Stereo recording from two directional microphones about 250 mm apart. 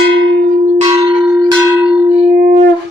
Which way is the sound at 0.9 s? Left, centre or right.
Centre.